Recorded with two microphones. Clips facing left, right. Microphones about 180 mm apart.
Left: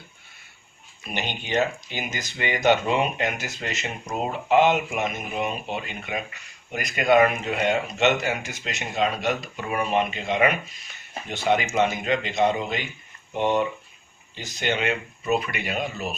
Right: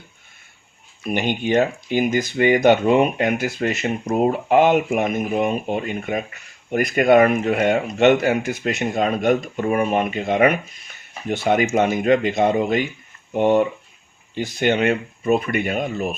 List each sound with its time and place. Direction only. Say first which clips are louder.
1.0 s speech: right 10 dB; 50° right (ahead or behind)